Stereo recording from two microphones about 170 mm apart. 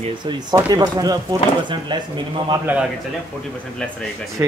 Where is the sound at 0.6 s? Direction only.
25° right (ahead or behind).